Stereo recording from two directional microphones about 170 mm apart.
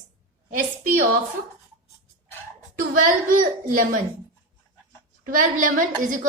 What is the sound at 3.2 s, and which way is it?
Speech, 55° right (ahead or behind).